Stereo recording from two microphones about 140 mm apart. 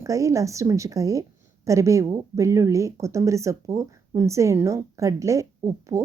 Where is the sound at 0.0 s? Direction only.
20° right (ahead or behind).